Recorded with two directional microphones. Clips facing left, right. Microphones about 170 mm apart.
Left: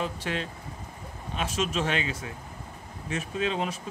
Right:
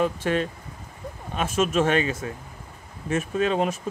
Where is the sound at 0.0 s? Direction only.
50° right (ahead or behind).